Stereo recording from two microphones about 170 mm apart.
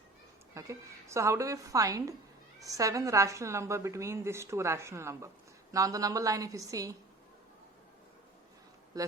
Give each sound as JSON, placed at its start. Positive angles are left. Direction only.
{"t": 0.5, "sound": "a woman's voice", "side_deg": -15}
{"t": 8.9, "sound": "speech", "side_deg": -20}